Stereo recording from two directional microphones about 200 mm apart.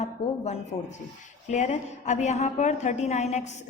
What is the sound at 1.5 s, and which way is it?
A woman's voice, 35° left (ahead or behind).